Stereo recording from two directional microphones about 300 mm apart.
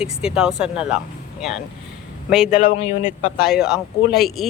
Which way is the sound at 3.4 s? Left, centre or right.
Centre.